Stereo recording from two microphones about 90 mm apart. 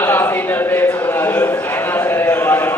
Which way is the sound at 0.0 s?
25° left (ahead or behind).